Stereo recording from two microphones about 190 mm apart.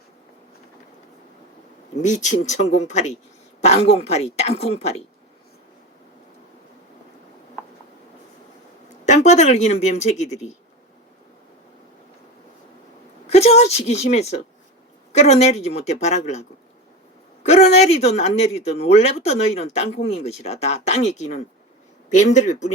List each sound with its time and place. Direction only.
2.0 s speech: 40° left (ahead or behind)
9.0 s speech: 40° left (ahead or behind)
13.2 s speech: 35° left (ahead or behind)
17.4 s speech: 35° left (ahead or behind)